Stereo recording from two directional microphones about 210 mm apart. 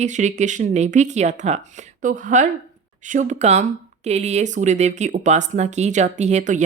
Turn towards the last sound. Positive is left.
turn(degrees=-35)  # may be behind; listen again after turning